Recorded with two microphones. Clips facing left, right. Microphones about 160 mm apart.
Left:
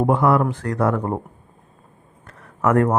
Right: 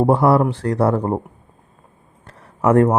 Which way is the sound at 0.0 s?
35° right (ahead or behind).